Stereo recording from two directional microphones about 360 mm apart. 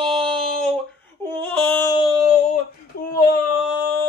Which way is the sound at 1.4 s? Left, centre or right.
Centre.